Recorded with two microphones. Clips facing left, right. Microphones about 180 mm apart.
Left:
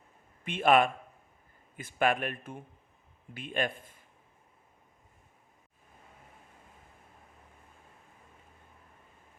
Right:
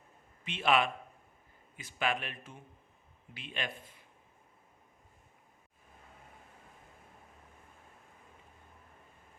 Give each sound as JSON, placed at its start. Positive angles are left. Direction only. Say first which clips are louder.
{"t": 0.4, "sound": "speech", "louder": "left 5 dB", "side_deg": 50}